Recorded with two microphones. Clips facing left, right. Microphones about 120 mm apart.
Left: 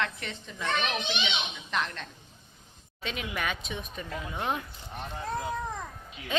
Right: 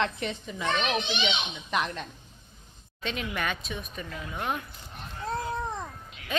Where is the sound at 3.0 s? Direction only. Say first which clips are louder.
Right 2 dB; 10° left (ahead or behind); by 4.6 s 25° left (ahead or behind).